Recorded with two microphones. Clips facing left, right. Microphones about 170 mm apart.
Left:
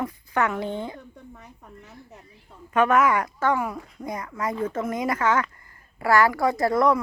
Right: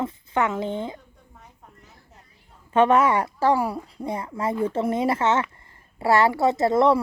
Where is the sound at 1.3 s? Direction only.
70° left (ahead or behind).